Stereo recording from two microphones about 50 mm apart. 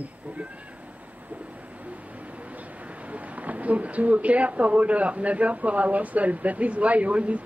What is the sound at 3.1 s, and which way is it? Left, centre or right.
A woman's voice, right.